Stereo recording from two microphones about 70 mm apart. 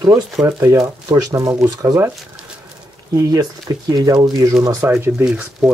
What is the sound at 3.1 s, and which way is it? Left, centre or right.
Speech, right.